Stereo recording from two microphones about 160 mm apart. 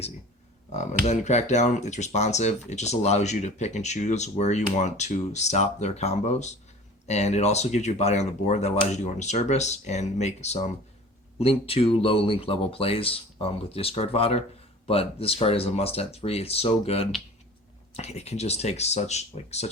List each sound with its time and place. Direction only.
1.0 s speech: 45° left (ahead or behind)